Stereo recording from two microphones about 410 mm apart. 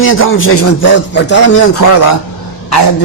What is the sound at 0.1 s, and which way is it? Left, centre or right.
A man's voice, left.